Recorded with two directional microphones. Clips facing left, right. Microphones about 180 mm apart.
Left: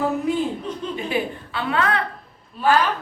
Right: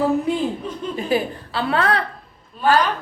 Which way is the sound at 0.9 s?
35° right (ahead or behind).